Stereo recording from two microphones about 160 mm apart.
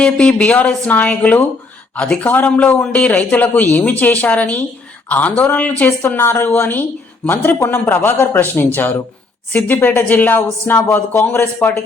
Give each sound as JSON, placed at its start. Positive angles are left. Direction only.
{"t": 0.0, "sound": "a man's voice", "side_deg": 5}